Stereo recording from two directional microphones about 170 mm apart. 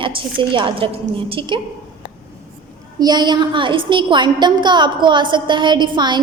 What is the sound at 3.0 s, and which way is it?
A woman's voice, 25° right (ahead or behind).